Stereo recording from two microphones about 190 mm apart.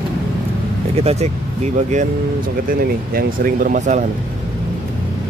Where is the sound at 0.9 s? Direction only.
35° right (ahead or behind).